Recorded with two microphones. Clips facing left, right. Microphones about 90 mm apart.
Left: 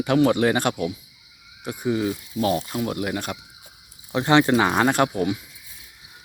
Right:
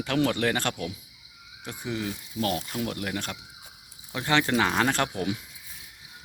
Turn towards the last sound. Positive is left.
turn(degrees=5)  # may be behind; listen again after turning